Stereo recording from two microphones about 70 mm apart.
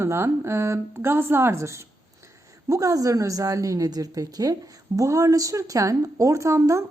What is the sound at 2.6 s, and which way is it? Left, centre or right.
A woman's voice, right.